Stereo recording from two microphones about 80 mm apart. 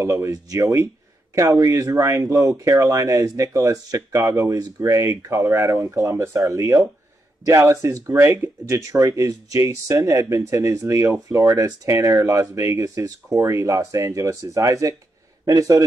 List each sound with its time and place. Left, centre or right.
0.0 s a man's voice: right